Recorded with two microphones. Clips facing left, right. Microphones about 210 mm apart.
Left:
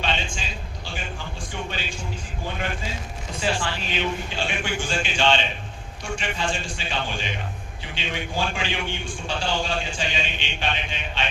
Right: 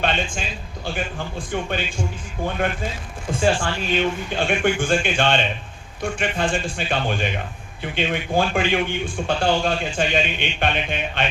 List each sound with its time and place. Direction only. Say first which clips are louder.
0.0 s a man's voice: right 5 dB; 55° right (ahead or behind)